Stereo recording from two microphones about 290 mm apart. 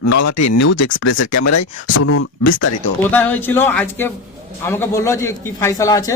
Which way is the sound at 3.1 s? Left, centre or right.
Centre.